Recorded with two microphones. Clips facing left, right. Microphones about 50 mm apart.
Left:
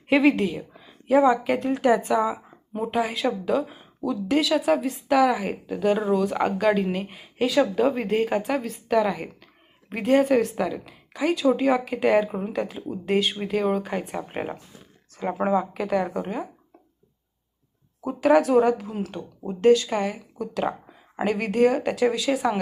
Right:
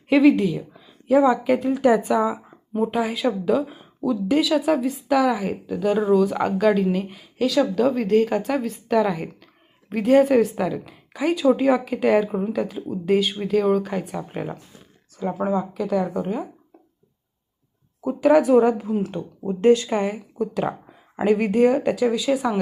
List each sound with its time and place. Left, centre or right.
0.1 s speech: centre
14.3 s speech: left
15.4 s a woman's voice: left
16.0 s speech: centre
18.0 s speech: centre
19.6 s speech: right
20.0 s speech: centre